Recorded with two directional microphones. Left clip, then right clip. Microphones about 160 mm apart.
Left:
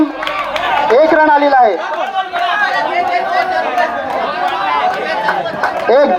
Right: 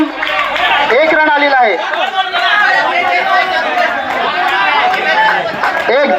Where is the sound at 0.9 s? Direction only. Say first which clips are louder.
Left 4 dB; 40° left (ahead or behind).